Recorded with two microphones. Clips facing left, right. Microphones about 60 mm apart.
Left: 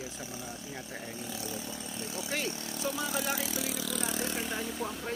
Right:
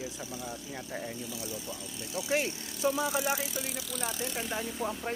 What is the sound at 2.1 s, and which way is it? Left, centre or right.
Speech, right.